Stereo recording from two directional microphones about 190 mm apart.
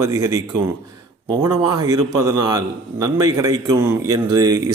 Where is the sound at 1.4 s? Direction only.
20° right (ahead or behind).